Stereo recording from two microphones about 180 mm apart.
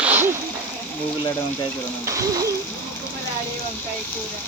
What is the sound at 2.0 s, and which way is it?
Speech, 20° right (ahead or behind).